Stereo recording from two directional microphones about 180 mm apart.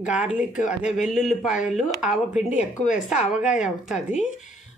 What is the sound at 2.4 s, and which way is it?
Speech, 40° left (ahead or behind).